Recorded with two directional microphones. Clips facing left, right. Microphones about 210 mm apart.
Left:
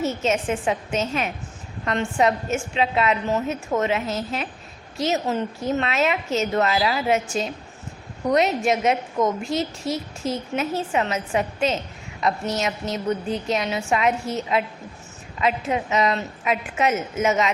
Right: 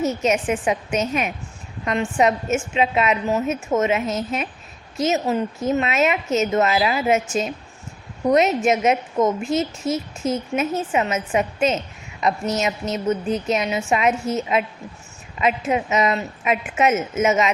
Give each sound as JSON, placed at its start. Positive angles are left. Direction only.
{"t": 0.2, "sound": "a woman's voice", "side_deg": -15}